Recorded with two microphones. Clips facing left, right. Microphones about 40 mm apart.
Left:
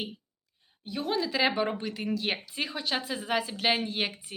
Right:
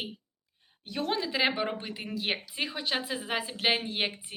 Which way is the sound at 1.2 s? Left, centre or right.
Right.